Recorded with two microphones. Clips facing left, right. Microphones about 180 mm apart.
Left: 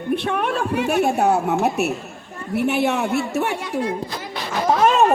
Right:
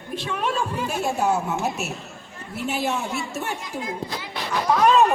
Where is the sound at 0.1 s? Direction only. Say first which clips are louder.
Left 5 dB; 60° left (ahead or behind).